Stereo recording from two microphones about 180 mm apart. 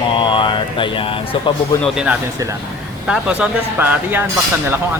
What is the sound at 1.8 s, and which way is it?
Speech, 5° right (ahead or behind).